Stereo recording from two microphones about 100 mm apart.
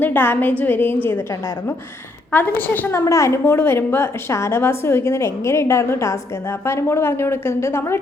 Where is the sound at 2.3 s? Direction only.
15° left (ahead or behind).